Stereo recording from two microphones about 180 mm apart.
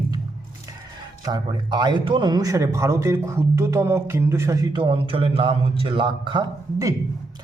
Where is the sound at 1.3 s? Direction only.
25° right (ahead or behind).